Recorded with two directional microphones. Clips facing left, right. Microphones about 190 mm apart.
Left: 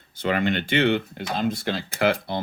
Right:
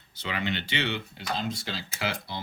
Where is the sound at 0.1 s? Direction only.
50° left (ahead or behind).